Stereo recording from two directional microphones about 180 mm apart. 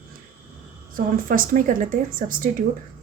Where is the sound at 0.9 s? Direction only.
50° right (ahead or behind).